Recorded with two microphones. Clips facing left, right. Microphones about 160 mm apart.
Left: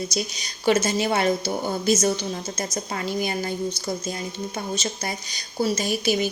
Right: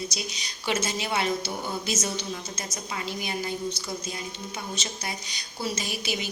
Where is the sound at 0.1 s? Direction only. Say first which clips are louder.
Left 7 dB; 45° left (ahead or behind).